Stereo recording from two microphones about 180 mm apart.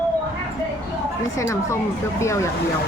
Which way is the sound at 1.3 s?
15° left (ahead or behind).